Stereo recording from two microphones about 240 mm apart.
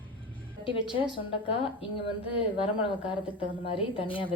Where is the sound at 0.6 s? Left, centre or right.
Left.